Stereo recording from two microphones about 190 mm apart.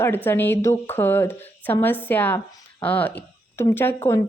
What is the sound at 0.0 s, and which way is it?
Speech, 10° left (ahead or behind).